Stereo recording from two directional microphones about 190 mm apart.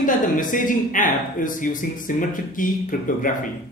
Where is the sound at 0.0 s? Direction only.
45° left (ahead or behind).